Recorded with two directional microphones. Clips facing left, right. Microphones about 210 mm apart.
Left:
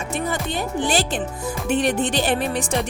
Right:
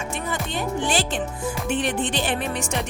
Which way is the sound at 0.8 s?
40° left (ahead or behind).